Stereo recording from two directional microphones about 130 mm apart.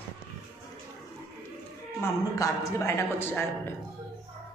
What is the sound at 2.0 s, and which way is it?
A man's voice, 25° left (ahead or behind).